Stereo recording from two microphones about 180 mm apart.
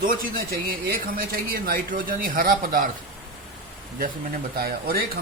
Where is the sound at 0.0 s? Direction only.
55° right (ahead or behind).